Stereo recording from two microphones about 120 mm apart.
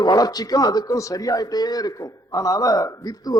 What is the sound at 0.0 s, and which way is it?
A man's voice, 35° left (ahead or behind).